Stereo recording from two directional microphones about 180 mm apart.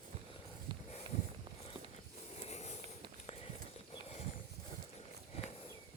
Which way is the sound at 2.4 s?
40° left (ahead or behind).